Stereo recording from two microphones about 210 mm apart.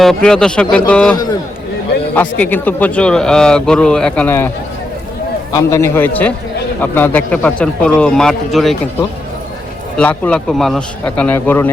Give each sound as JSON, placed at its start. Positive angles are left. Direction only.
{"t": 0.0, "sound": "speech", "side_deg": 0}
{"t": 1.1, "sound": "a man's voice", "side_deg": 20}